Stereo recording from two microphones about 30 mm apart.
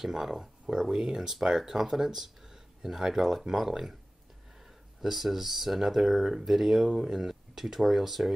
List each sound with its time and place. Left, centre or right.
0.0 s speech: centre
5.0 s speech: centre